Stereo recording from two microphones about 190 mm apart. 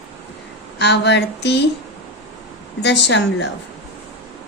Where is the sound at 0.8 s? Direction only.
65° left (ahead or behind).